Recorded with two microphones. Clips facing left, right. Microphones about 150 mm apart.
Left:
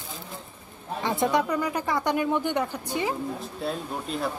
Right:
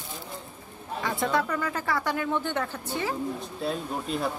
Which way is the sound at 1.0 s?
20° left (ahead or behind).